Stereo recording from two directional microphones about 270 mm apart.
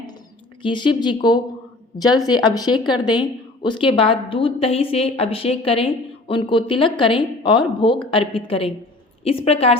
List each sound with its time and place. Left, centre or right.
0.6 s speech: centre